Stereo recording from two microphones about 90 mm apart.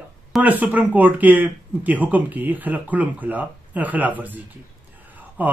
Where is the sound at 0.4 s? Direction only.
20° right (ahead or behind).